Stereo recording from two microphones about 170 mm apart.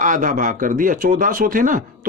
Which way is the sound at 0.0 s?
50° right (ahead or behind).